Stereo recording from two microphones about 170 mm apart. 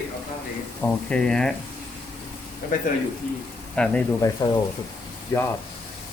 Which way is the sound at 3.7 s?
5° left (ahead or behind).